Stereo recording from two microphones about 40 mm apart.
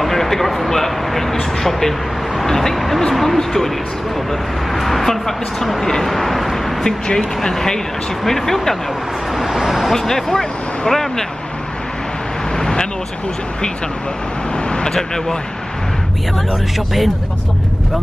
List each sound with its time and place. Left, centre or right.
0.0 s speech: centre
6.8 s speech: centre
9.4 s speech: centre
12.5 s vehicle: centre
14.7 s speech: left
16.7 s speech: centre